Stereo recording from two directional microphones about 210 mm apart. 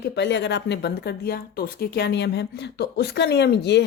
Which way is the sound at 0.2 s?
55° left (ahead or behind).